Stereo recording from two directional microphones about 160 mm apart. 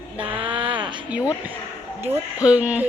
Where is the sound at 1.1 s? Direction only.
10° right (ahead or behind).